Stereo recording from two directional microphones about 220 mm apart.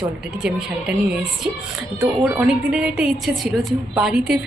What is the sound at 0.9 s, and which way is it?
A woman's voice, 5° right (ahead or behind).